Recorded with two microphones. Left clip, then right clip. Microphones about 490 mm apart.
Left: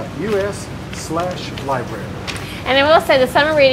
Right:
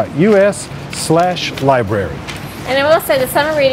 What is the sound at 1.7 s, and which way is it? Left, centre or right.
Speech, right.